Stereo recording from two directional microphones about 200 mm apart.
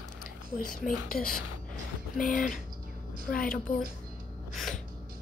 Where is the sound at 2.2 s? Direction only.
40° left (ahead or behind).